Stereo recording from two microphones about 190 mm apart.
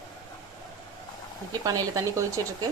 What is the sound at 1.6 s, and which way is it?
Speech, 20° right (ahead or behind).